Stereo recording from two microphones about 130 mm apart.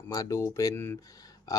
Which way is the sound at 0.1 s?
25° left (ahead or behind).